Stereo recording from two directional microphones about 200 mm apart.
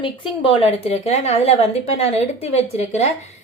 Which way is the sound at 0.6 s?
30° left (ahead or behind).